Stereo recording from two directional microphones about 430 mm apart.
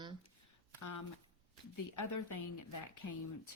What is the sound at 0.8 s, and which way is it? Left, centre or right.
A woman's voice, left.